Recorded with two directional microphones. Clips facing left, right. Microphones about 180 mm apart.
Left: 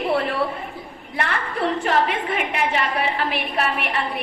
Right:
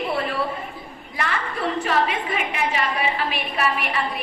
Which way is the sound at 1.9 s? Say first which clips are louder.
Even; 60° left (ahead or behind).